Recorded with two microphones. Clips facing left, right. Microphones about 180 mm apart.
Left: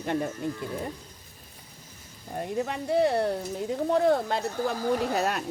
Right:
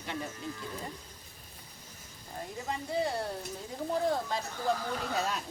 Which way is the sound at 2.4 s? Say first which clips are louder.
Left 8 dB; 70° left (ahead or behind).